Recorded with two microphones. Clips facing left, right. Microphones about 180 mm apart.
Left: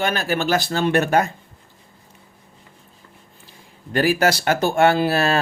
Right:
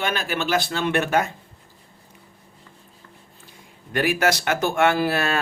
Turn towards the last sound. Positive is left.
turn(degrees=30)  # may be behind; listen again after turning